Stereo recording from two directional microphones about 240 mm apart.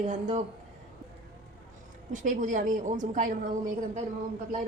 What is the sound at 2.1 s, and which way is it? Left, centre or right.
A woman's voice, right.